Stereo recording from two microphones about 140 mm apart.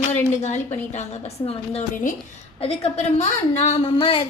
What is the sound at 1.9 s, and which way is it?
Speech, 70° left (ahead or behind).